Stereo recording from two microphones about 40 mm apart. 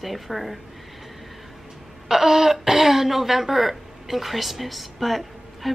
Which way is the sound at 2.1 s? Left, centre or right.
Centre.